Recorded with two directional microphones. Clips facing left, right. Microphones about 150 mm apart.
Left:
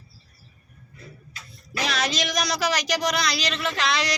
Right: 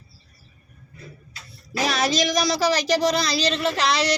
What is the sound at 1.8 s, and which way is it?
Speech, 40° right (ahead or behind).